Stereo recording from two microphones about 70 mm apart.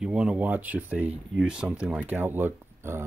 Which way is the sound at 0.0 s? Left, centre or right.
Centre.